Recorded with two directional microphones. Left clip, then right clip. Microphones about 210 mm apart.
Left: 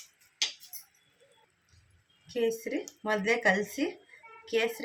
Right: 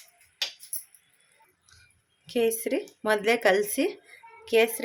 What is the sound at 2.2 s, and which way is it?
Speech, 50° right (ahead or behind).